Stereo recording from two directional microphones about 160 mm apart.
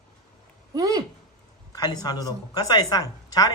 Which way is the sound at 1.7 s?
25° left (ahead or behind).